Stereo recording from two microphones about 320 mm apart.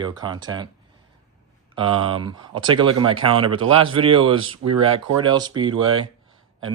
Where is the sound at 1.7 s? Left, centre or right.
Centre.